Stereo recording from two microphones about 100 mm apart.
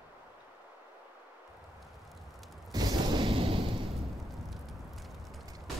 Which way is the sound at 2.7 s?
45° right (ahead or behind).